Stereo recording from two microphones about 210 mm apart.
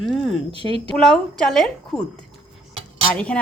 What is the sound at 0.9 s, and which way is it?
Speech, 5° left (ahead or behind).